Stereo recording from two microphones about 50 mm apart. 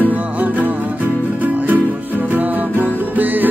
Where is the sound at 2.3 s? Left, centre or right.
Right.